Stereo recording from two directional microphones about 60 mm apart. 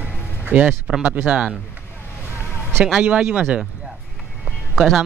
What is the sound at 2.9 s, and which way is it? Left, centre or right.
Speech, right.